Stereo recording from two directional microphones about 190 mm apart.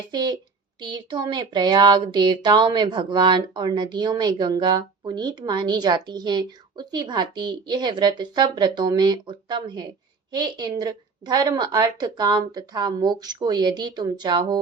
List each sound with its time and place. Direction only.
0.1 s speech: 25° right (ahead or behind)